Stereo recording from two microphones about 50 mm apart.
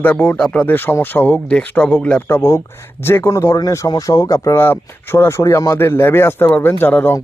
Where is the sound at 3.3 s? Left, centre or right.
Left.